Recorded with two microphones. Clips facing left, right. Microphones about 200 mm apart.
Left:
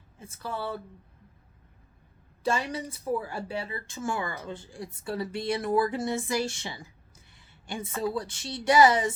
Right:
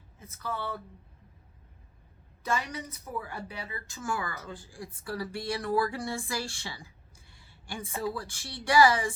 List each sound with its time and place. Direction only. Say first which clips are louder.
0.2 s speech: left 2 dB; 30° left (ahead or behind)
2.4 s speech: left 4 dB; 30° left (ahead or behind)